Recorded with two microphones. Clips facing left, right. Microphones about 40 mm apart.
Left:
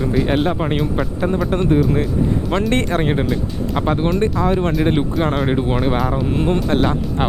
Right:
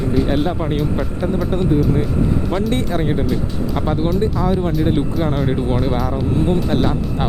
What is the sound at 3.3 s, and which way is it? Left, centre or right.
Speech, left.